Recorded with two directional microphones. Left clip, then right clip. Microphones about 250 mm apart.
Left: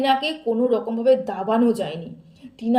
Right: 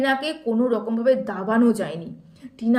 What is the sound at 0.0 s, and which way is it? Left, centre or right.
A woman's voice, centre.